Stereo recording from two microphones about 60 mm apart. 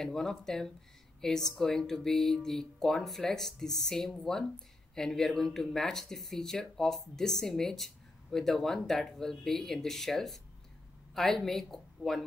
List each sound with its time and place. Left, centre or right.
0.0 s a woman's voice: centre